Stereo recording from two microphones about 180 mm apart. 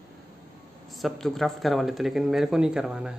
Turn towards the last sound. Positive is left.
turn(degrees=-5)  # may be behind; listen again after turning